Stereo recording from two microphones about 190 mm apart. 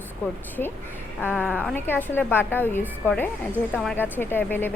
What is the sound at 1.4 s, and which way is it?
A woman's voice, 10° left (ahead or behind).